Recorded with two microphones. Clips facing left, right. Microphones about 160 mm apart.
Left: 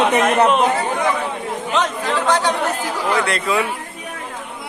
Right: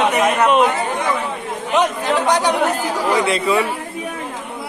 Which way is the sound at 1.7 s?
15° right (ahead or behind).